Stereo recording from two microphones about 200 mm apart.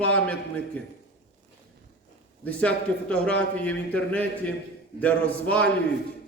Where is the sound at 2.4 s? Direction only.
5° left (ahead or behind).